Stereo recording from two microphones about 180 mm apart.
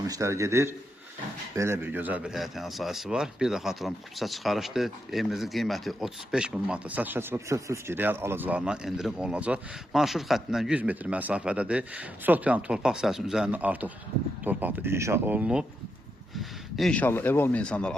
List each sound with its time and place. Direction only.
0.1 s a man's voice: 15° right (ahead or behind); by 17.9 s 5° left (ahead or behind)